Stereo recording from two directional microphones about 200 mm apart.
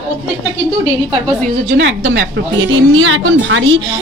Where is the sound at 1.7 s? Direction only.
65° right (ahead or behind).